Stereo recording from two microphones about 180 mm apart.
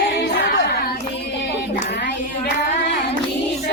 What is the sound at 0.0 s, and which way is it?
Singing, 80° left.